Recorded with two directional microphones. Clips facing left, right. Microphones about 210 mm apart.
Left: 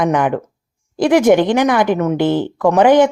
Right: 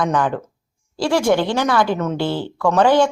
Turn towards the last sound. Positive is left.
turn(degrees=20)  # may be behind; listen again after turning